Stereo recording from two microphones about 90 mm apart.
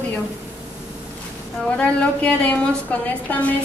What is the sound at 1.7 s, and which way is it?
A woman's voice, 15° left (ahead or behind).